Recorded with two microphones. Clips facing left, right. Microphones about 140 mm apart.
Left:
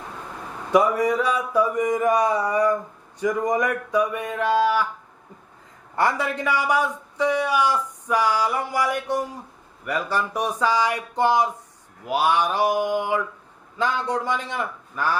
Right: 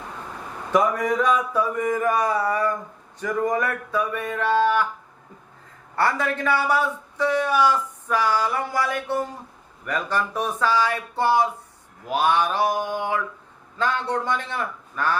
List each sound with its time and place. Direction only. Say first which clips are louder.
0.7 s a man's voice: left 2 dB; 10° left (ahead or behind)
6.0 s a man's voice: even; 15° left (ahead or behind)